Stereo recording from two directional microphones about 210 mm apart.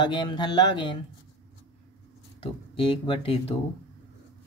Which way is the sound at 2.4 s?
25° left (ahead or behind).